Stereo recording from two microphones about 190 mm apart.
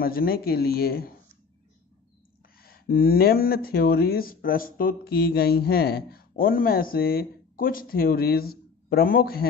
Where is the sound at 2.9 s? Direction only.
50° left (ahead or behind).